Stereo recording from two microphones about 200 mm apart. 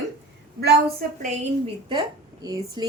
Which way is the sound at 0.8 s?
30° right (ahead or behind).